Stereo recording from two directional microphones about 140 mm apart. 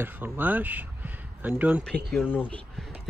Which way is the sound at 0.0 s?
15° right (ahead or behind).